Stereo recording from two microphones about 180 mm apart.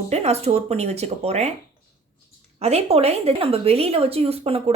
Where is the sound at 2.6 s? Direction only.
35° right (ahead or behind).